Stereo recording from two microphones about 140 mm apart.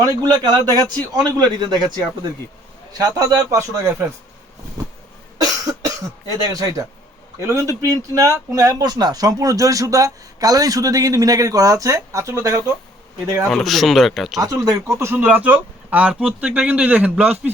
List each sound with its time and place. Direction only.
0.0 s speech: 30° right (ahead or behind)
5.4 s cough: 25° right (ahead or behind)
7.3 s speech: 20° right (ahead or behind)
13.5 s speech: centre (ahead or behind)
14.4 s speech: 25° right (ahead or behind)